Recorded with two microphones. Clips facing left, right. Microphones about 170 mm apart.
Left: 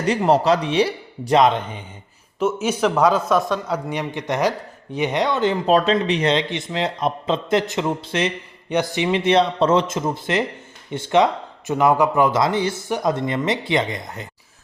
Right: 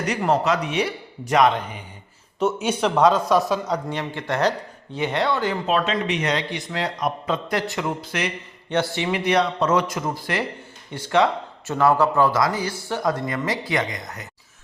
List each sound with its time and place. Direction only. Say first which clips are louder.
0.0 s speech: left 4 dB; 30° left (ahead or behind)
2.4 s a man's voice: left 2 dB; centre (ahead or behind)
3.8 s speech: left 2 dB; 15° left (ahead or behind)
5.6 s speech: left 7 dB; 35° left (ahead or behind)
8.7 s speech: left 3 dB; 15° left (ahead or behind)